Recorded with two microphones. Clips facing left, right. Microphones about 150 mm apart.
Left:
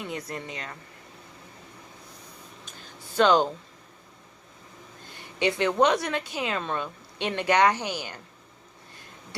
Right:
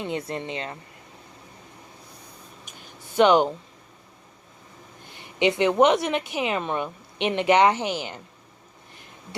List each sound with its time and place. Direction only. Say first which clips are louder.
0.0 s a woman's voice: right 5 dB; 25° right (ahead or behind)
2.6 s a sound: even; 20° right (ahead or behind)
5.0 s a woman's voice: right 4 dB; 20° right (ahead or behind)